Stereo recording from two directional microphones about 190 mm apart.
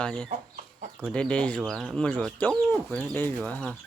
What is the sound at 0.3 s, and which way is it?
Chicken, 45° right (ahead or behind).